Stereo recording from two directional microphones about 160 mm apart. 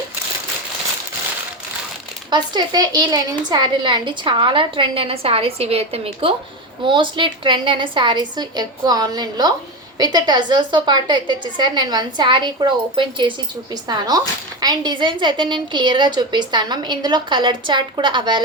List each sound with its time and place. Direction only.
2.3 s a woman's voice: 25° right (ahead or behind)